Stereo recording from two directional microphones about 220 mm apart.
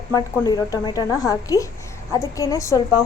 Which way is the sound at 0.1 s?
15° left (ahead or behind).